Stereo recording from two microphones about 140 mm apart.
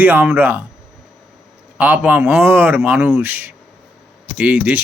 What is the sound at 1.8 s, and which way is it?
Speech, 10° right (ahead or behind).